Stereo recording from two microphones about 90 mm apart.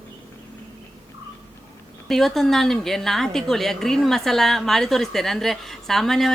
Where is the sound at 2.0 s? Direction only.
5° left (ahead or behind).